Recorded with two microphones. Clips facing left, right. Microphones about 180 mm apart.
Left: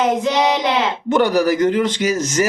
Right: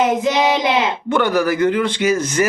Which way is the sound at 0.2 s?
10° right (ahead or behind).